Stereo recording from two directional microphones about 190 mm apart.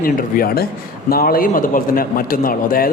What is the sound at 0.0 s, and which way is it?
A man's voice, 50° left (ahead or behind).